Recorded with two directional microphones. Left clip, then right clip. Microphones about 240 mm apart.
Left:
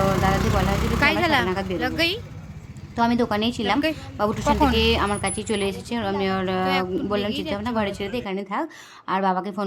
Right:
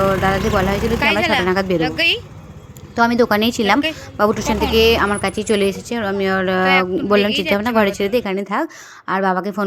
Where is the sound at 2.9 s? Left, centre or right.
Right.